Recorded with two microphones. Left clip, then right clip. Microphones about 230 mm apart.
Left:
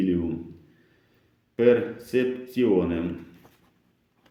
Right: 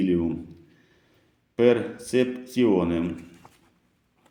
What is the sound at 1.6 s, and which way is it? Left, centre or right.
Speech, right.